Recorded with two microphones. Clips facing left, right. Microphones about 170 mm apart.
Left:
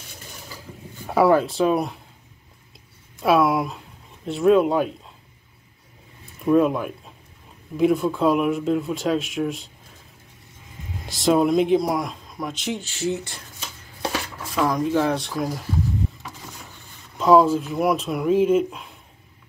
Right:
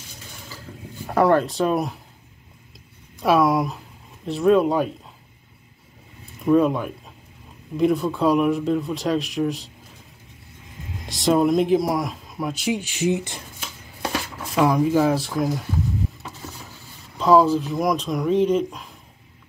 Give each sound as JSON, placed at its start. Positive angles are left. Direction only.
{"t": 0.5, "sound": "a sound", "side_deg": 10}
{"t": 3.2, "sound": "speech", "side_deg": 0}
{"t": 6.4, "sound": "speech", "side_deg": 0}
{"t": 11.1, "sound": "speech", "side_deg": 0}
{"t": 14.6, "sound": "speech", "side_deg": -5}
{"t": 17.2, "sound": "speech", "side_deg": 0}